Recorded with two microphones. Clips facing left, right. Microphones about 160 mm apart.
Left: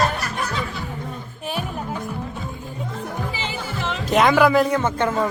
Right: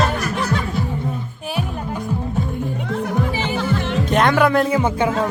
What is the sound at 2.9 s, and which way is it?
Music, 85° right.